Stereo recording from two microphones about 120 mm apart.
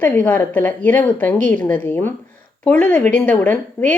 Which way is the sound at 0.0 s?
15° left (ahead or behind).